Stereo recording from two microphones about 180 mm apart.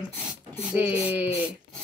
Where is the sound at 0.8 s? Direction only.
10° right (ahead or behind).